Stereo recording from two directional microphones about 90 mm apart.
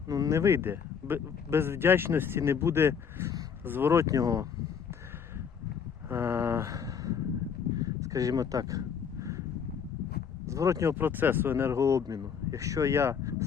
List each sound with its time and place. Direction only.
0.1 s speech: 35° right (ahead or behind)
6.1 s a sound: 30° right (ahead or behind)
7.8 s speech: 40° right (ahead or behind)
10.4 s speech: 35° right (ahead or behind)